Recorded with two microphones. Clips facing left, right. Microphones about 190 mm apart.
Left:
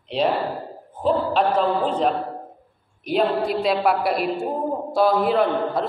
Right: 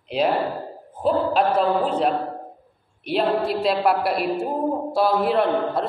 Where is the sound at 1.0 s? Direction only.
5° right (ahead or behind).